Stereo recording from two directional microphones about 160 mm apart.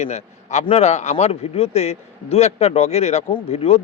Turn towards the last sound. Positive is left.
turn(degrees=40)  # may be behind; listen again after turning